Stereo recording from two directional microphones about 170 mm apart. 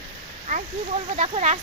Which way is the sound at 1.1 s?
40° right (ahead or behind).